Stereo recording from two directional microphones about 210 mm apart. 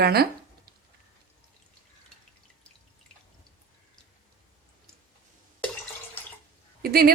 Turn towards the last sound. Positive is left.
turn(degrees=-45)  # may be behind; listen again after turning